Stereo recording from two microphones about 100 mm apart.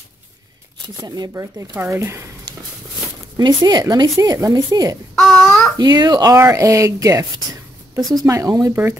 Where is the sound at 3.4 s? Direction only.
45° right (ahead or behind).